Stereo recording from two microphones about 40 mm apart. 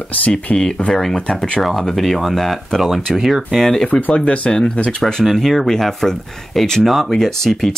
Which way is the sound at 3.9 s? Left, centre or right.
Left.